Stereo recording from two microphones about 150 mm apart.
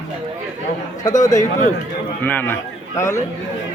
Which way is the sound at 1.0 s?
25° left (ahead or behind).